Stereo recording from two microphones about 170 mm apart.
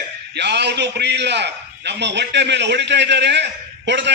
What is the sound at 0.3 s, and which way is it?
A man's voice, 85° right.